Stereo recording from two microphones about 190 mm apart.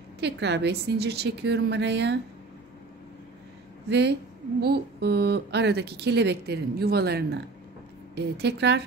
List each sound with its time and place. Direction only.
0.2 s speech: 65° right (ahead or behind)
3.9 s speech: 60° right (ahead or behind)